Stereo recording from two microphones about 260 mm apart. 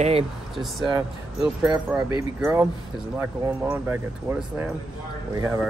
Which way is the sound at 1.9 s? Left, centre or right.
Centre.